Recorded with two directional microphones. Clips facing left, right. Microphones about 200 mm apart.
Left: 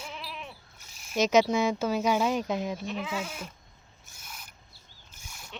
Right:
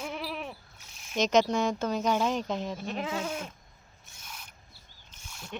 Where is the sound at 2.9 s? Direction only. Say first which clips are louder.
Right 1 dB; 45° right (ahead or behind).